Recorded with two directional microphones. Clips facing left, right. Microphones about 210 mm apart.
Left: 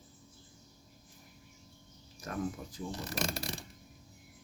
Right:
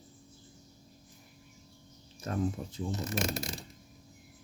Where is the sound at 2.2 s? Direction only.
25° right (ahead or behind).